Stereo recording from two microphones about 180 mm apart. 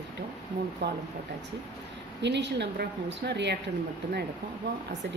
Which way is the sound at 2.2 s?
75° right (ahead or behind).